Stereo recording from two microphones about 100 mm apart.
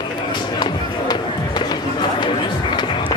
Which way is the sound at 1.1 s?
45° left (ahead or behind).